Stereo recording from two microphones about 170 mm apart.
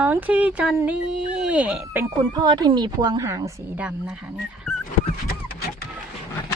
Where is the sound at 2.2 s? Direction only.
25° right (ahead or behind); by 4.7 s 5° right (ahead or behind).